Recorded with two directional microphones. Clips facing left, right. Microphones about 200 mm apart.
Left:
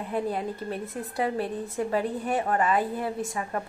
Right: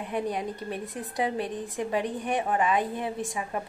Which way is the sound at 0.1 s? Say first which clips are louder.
Left 1 dB; 15° right (ahead or behind).